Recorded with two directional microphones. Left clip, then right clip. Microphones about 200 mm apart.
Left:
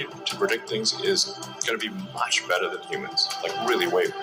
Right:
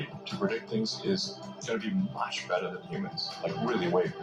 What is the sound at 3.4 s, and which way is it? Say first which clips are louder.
Speech: left 7 dB; 25° left (ahead or behind).